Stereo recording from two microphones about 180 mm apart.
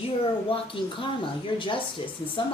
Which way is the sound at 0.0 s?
30° left (ahead or behind).